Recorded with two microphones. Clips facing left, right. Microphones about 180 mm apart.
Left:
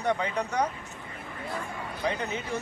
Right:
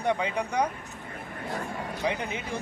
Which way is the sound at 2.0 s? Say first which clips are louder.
Left 1 dB; 15° right (ahead or behind).